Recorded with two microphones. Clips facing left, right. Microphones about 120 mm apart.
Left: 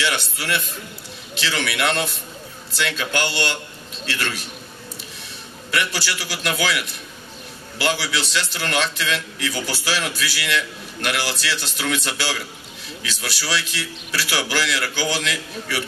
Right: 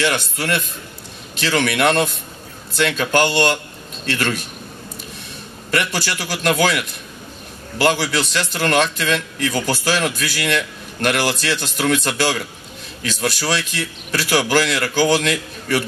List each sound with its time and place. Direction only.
0.0 s a man's voice: 45° right (ahead or behind)
5.7 s a man's voice: 45° right (ahead or behind)